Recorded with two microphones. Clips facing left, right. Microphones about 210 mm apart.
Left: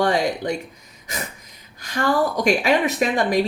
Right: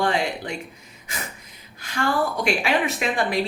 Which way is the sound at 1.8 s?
40° left (ahead or behind).